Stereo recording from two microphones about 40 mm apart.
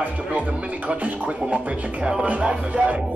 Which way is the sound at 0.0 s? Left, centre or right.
Right.